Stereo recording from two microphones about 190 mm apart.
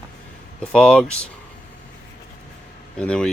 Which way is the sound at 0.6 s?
5° left (ahead or behind).